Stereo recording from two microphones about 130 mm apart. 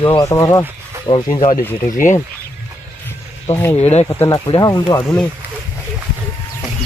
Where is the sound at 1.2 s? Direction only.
65° left (ahead or behind).